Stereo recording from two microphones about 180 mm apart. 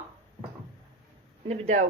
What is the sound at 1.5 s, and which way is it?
Speech, 40° right (ahead or behind).